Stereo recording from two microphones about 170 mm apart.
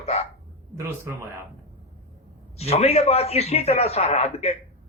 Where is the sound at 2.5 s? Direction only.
40° left (ahead or behind).